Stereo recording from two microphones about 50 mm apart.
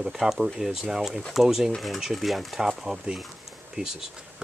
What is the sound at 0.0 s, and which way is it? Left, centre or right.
Speech, centre.